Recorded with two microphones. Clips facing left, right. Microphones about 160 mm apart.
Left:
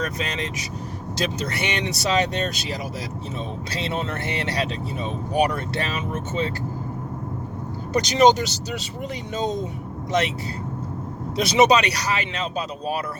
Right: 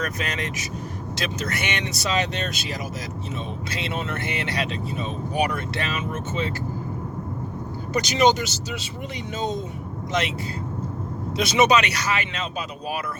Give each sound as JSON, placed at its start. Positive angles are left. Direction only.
{"t": 0.0, "sound": "speech", "side_deg": 30}
{"t": 7.9, "sound": "speech", "side_deg": 35}
{"t": 10.1, "sound": "speech", "side_deg": 35}
{"t": 11.3, "sound": "speech", "side_deg": 35}